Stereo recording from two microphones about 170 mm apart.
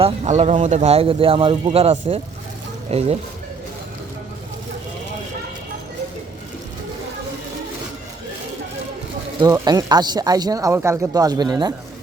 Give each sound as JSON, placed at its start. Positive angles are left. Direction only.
{"t": 0.0, "sound": "speech", "side_deg": -40}
{"t": 9.4, "sound": "speech", "side_deg": -25}